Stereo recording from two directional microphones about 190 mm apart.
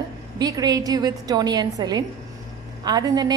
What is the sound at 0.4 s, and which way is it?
Speech, 20° right (ahead or behind).